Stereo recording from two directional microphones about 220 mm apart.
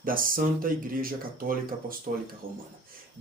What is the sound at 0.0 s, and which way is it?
Speech, 40° right (ahead or behind).